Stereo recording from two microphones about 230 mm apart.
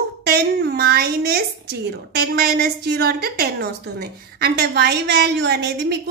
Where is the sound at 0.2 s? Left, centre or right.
Right.